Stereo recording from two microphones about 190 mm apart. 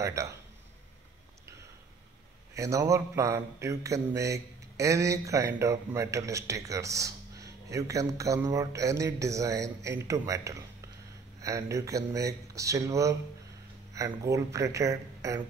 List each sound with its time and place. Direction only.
0.0 s speech: 15° right (ahead or behind)
2.5 s speech: 15° right (ahead or behind)